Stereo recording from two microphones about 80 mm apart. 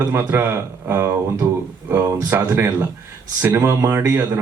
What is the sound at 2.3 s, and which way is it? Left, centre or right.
A man's voice, right.